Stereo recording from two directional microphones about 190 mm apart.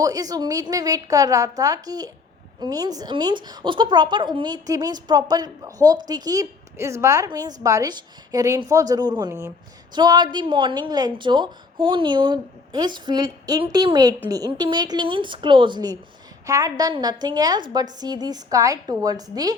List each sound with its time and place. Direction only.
0.0 s a woman's voice: 20° right (ahead or behind)